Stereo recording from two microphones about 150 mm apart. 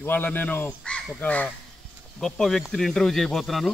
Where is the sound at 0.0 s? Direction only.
15° left (ahead or behind).